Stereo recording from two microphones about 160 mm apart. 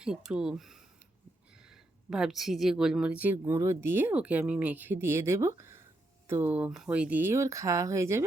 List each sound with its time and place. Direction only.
0.0 s speech: 5° right (ahead or behind)